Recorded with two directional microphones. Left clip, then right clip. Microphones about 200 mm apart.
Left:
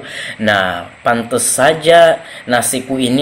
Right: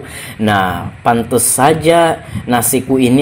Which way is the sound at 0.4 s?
15° right (ahead or behind).